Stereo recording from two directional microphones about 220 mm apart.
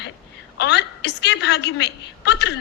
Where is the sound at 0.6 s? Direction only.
50° left (ahead or behind).